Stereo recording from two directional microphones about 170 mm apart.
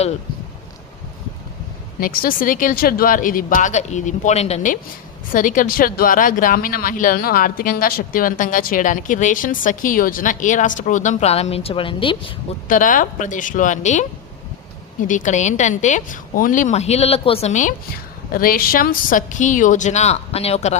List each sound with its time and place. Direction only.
2.0 s speech: 55° left (ahead or behind); by 12.3 s 30° left (ahead or behind)
12.6 s speech: 50° left (ahead or behind)
18.3 s speech: 60° left (ahead or behind); by 20.7 s 40° left (ahead or behind)